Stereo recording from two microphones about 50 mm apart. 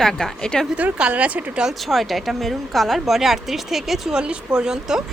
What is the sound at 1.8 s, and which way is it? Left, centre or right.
A woman's voice, centre.